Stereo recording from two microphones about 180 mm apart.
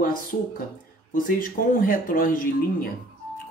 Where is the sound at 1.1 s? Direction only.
50° left (ahead or behind).